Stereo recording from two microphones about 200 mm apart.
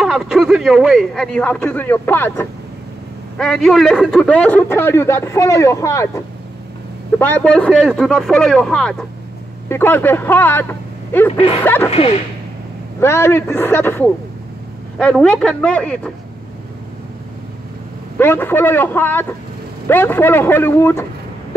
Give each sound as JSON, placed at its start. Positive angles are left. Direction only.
{"t": 0.0, "sound": "a man's voice", "side_deg": 0}
{"t": 11.3, "sound": "speech", "side_deg": 30}
{"t": 11.6, "sound": "a man's voice", "side_deg": 10}
{"t": 11.9, "sound": "speech", "side_deg": 30}
{"t": 13.0, "sound": "a man's voice", "side_deg": 15}
{"t": 18.1, "sound": "a man's voice", "side_deg": 10}